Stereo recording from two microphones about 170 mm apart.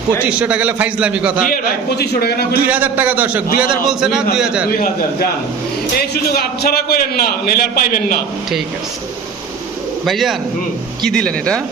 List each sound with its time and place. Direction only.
0.2 s a man's voice: 5° right (ahead or behind)
2.0 s a man's voice: 65° left (ahead or behind)
2.6 s a man's voice: 10° right (ahead or behind)
6.0 s a man's voice: 65° left (ahead or behind)
10.1 s speech: centre (ahead or behind)